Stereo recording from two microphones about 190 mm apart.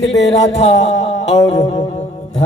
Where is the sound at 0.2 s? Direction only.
35° left (ahead or behind).